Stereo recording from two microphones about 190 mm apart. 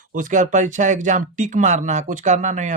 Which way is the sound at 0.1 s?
45° right (ahead or behind).